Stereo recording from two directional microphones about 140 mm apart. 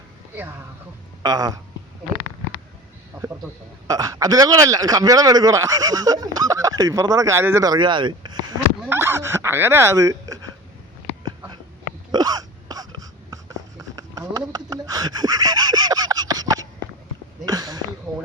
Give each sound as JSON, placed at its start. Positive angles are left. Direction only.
{"t": 1.2, "sound": "speech", "side_deg": -25}
{"t": 3.8, "sound": "speech", "side_deg": -25}
{"t": 8.9, "sound": "speech", "side_deg": -15}
{"t": 12.1, "sound": "hiccup", "side_deg": -25}
{"t": 17.4, "sound": "a sound", "side_deg": -30}
{"t": 18.1, "sound": "speech", "side_deg": 0}